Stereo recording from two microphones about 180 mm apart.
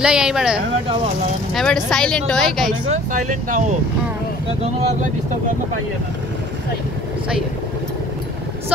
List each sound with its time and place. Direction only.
0.0 s speech: 5° right (ahead or behind)
2.9 s speech: 45° right (ahead or behind)